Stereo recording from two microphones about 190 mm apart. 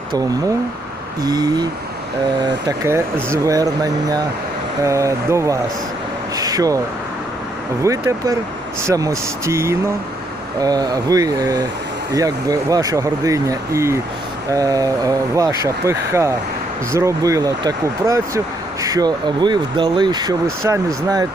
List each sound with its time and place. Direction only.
1.2 s speech: 20° right (ahead or behind)
6.3 s a sound: 20° right (ahead or behind)
7.9 s speech: 15° right (ahead or behind)